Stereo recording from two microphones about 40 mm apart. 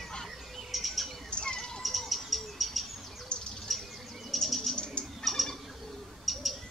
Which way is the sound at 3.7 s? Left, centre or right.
Centre.